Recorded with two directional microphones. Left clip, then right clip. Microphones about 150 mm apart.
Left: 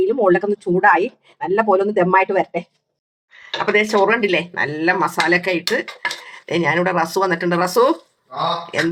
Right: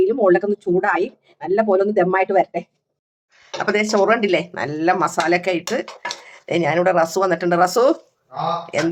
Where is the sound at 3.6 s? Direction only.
30° right (ahead or behind).